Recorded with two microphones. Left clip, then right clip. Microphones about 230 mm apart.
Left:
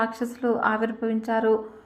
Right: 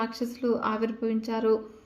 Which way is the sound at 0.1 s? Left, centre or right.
Centre.